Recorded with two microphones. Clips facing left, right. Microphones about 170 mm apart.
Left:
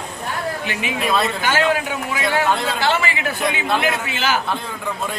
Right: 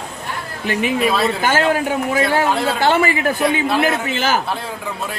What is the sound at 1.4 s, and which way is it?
A man's voice, 45° right (ahead or behind).